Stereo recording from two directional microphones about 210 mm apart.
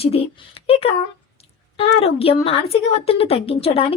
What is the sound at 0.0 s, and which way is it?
A woman's voice, 30° left (ahead or behind).